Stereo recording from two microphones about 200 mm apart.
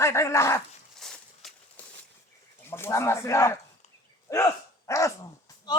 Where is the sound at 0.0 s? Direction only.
15° left (ahead or behind).